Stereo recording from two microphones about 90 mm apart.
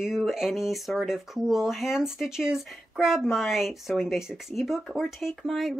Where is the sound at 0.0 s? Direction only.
5° right (ahead or behind).